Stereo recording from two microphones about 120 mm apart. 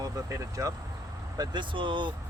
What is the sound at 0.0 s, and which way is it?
Speech, 30° right (ahead or behind).